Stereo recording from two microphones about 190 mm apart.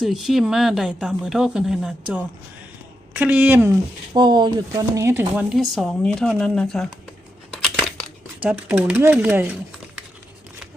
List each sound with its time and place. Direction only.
0.0 s speech: centre (ahead or behind)
4.1 s speech: 25° right (ahead or behind); by 6.8 s centre (ahead or behind)
7.5 s crushing: 5° left (ahead or behind)
8.4 s speech: 5° right (ahead or behind)